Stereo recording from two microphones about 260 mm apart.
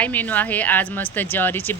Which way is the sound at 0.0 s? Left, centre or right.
Centre.